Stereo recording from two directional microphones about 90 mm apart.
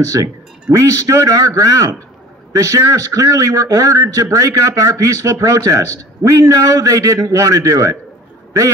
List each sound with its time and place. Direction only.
0.0 s a man's voice: 35° right (ahead or behind)